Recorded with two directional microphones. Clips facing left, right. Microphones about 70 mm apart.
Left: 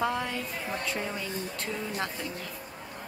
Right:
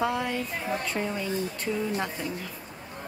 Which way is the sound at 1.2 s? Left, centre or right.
Centre.